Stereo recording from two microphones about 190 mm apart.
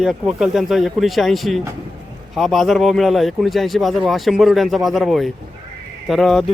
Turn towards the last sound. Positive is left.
turn(degrees=0)  # may be behind; listen again after turning